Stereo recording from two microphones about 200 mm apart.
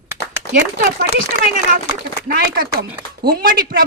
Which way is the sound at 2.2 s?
50° right (ahead or behind).